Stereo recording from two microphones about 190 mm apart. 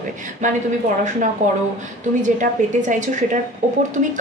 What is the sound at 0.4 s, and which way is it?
A woman's voice, 40° right (ahead or behind).